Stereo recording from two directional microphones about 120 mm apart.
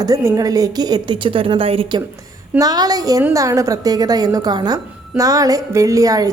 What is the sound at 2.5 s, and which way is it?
A woman's voice, 30° right (ahead or behind).